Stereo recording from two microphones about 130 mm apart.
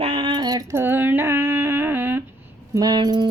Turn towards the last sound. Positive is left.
turn(degrees=-35)  # may be behind; listen again after turning